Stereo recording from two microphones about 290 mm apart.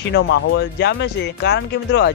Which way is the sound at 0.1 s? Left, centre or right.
Left.